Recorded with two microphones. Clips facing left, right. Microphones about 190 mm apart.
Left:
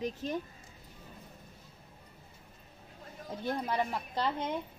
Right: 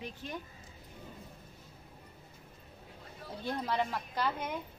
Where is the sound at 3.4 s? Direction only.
15° left (ahead or behind).